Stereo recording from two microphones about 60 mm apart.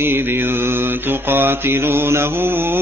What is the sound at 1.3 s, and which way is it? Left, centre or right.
Music, right.